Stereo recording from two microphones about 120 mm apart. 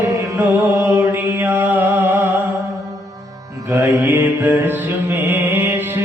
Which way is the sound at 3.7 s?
20° right (ahead or behind).